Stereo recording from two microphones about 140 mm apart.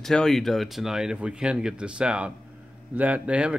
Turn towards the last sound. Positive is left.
turn(degrees=-10)  # may be behind; listen again after turning